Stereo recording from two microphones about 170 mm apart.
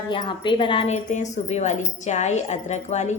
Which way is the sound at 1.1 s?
40° left (ahead or behind).